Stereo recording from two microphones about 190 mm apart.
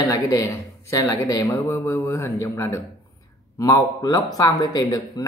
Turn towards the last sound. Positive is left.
turn(degrees=20)  # may be behind; listen again after turning